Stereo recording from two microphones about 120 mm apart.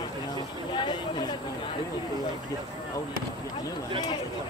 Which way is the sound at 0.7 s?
40° left (ahead or behind).